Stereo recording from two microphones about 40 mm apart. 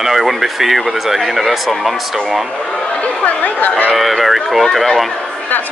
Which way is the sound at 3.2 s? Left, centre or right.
Left.